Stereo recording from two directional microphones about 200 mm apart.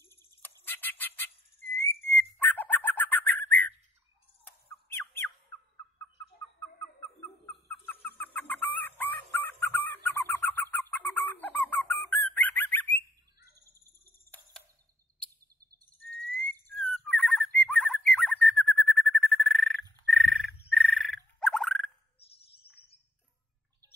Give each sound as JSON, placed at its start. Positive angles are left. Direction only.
{"t": 0.4, "sound": "whistle", "side_deg": 10}
{"t": 4.5, "sound": "squeak", "side_deg": 10}
{"t": 7.2, "sound": "chicken", "side_deg": 10}
{"t": 13.4, "sound": "bird", "side_deg": -15}
{"t": 14.0, "sound": "a sound", "side_deg": 10}
{"t": 16.6, "sound": "whistle", "side_deg": 5}
{"t": 17.6, "sound": "bird", "side_deg": 0}
{"t": 22.3, "sound": "bird", "side_deg": 30}